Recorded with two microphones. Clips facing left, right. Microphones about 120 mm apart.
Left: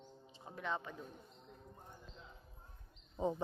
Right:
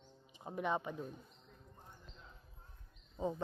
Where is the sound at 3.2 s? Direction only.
20° left (ahead or behind).